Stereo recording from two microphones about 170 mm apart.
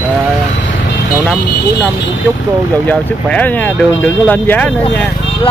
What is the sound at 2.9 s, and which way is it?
Speech, 10° left (ahead or behind).